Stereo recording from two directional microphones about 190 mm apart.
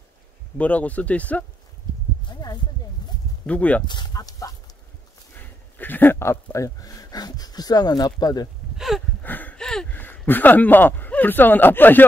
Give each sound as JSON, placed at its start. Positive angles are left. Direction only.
{"t": 0.6, "sound": "speech", "side_deg": 5}
{"t": 2.2, "sound": "a sound", "side_deg": 25}
{"t": 3.4, "sound": "speech", "side_deg": 5}
{"t": 3.8, "sound": "speech", "side_deg": 25}
{"t": 8.7, "sound": "a sound", "side_deg": 0}
{"t": 9.2, "sound": "speech", "side_deg": 10}